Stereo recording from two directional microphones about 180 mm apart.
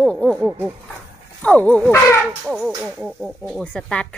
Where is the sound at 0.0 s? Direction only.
5° left (ahead or behind).